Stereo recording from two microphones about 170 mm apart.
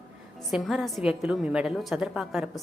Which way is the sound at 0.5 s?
Centre (ahead or behind).